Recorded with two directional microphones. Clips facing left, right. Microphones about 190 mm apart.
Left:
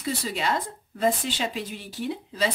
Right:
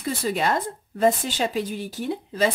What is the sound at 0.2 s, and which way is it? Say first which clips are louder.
A woman's voice: right 4 dB; 50° right (ahead or behind).